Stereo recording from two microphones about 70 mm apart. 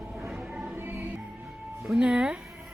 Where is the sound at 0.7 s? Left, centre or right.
Right.